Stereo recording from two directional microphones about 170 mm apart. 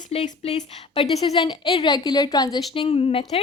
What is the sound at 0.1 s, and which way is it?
Speech, 40° left (ahead or behind).